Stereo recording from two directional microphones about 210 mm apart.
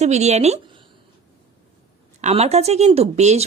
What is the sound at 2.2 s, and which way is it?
A woman's voice, 30° right (ahead or behind).